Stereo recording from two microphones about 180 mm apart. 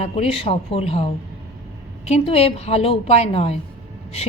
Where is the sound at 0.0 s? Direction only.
30° left (ahead or behind).